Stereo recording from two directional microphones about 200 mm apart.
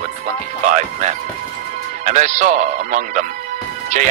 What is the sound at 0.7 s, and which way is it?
A man's voice, 35° right (ahead or behind).